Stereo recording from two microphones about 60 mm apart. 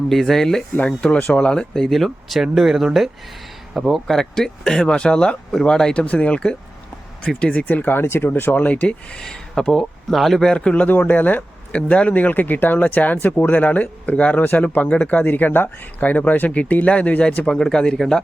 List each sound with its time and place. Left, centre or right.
0.1 s speech: centre
0.8 s speech: centre
7.6 s speech: left
9.2 s speech: centre
10.8 s speech: left; by 18.2 s centre